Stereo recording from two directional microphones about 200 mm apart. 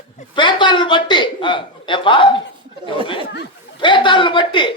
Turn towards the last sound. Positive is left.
turn(degrees=25)  # may be behind; listen again after turning